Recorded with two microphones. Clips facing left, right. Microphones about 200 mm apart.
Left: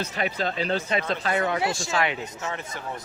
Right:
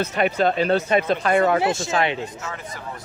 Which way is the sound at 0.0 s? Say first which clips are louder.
Right 8 dB; 65° right (ahead or behind).